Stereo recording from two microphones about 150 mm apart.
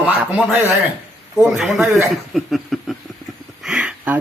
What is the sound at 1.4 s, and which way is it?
Speech, centre (ahead or behind).